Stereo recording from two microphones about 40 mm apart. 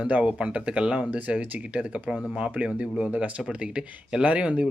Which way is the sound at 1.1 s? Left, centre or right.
Right.